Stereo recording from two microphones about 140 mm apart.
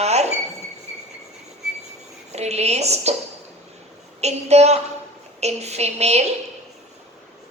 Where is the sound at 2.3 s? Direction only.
50° right (ahead or behind).